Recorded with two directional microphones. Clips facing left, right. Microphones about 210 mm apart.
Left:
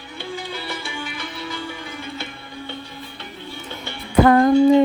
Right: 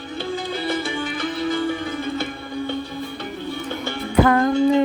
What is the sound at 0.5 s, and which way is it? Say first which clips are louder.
Music: right 7 dB; 50° right (ahead or behind).